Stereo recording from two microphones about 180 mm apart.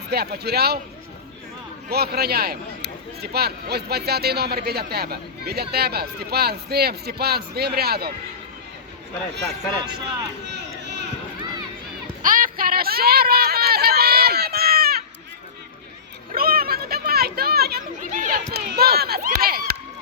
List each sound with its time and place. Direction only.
0.1 s a man's voice: 65° right (ahead or behind)
1.9 s a man's voice: 60° right (ahead or behind)
10.4 s speech: 70° right (ahead or behind)
10.8 s run: 70° right (ahead or behind)
12.2 s a sound: 50° right (ahead or behind)
16.3 s children playing: 55° right (ahead or behind)
18.5 s a sound: 60° right (ahead or behind)